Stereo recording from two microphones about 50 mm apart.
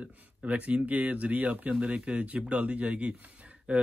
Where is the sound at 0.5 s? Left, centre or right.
Right.